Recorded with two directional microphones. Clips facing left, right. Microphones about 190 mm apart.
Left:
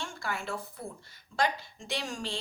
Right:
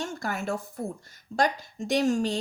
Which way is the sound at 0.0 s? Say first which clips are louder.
Right 6 dB; 45° right (ahead or behind).